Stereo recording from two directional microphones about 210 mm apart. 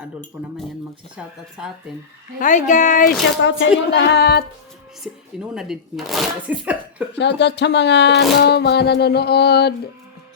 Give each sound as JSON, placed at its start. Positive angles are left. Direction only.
{"t": 1.1, "sound": "speech", "side_deg": -5}
{"t": 2.4, "sound": "speech", "side_deg": 35}
{"t": 3.4, "sound": "a sound", "side_deg": 55}
{"t": 5.0, "sound": "speech", "side_deg": -5}
{"t": 7.2, "sound": "speech", "side_deg": 55}
{"t": 8.4, "sound": "a sound", "side_deg": 50}